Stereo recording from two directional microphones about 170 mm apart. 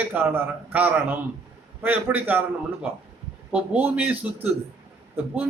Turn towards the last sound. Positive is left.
turn(degrees=-10)  # may be behind; listen again after turning